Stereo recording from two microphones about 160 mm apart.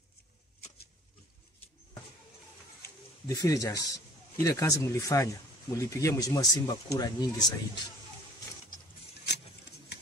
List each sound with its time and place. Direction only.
3.3 s speech: 20° left (ahead or behind)